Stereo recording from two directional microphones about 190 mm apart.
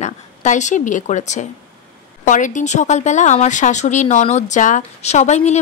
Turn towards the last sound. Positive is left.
turn(degrees=35)  # may be behind; listen again after turning